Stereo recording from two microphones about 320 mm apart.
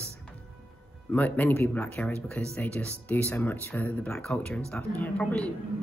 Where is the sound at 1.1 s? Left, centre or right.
Centre.